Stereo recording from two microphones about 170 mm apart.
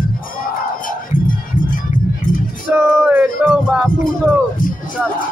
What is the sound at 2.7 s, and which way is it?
Music, 10° right (ahead or behind).